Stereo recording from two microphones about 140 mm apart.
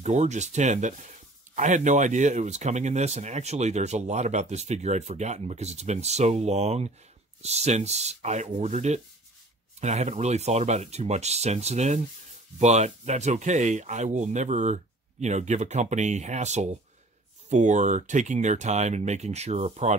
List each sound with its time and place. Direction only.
0.0 s speech: 55° right (ahead or behind)